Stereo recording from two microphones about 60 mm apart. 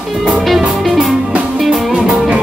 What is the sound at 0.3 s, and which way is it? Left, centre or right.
Music, centre.